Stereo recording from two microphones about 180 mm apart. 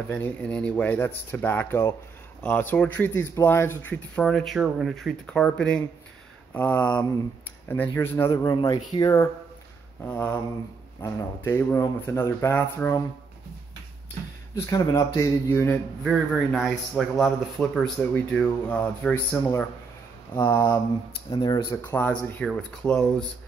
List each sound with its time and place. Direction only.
0.1 s a man's voice: 5° left (ahead or behind)
14.7 s speech: 20° left (ahead or behind)
16.0 s a man's voice: centre (ahead or behind)
20.3 s speech: 20° left (ahead or behind)
21.9 s a man's voice: 10° left (ahead or behind)